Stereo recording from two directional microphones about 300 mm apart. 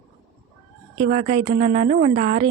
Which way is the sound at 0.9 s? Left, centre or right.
Right.